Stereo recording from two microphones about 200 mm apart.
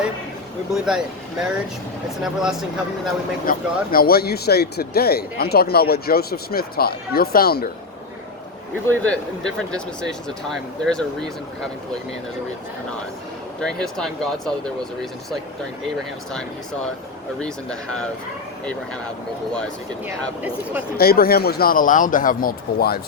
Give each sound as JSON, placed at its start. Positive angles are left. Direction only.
{"t": 0.7, "sound": "speech", "side_deg": -5}
{"t": 3.4, "sound": "speech", "side_deg": 45}
{"t": 9.0, "sound": "speech", "side_deg": 5}
{"t": 13.6, "sound": "speech", "side_deg": 0}
{"t": 17.4, "sound": "speech", "side_deg": 5}
{"t": 21.0, "sound": "speech", "side_deg": 50}